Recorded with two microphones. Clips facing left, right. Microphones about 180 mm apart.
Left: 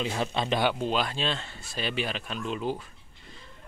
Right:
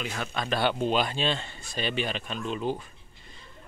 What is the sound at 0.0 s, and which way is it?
Speech, 25° left (ahead or behind).